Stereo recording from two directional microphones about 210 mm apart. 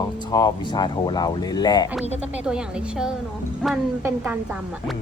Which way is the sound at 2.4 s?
5° right (ahead or behind).